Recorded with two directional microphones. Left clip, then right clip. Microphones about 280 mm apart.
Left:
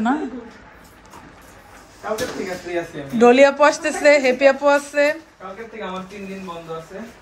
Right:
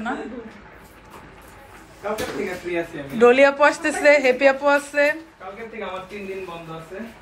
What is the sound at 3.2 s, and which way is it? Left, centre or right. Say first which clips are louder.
A woman's voice: left 2 dB; centre.